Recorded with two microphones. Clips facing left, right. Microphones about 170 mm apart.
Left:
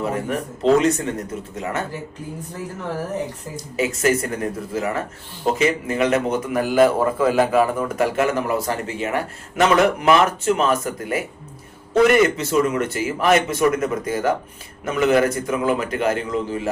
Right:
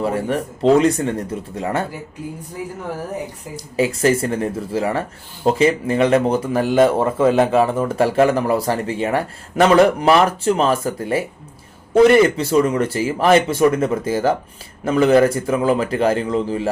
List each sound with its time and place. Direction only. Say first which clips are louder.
0.0 s speech: right 3 dB; 35° right (ahead or behind)
3.8 s speech: right 3 dB; 30° right (ahead or behind)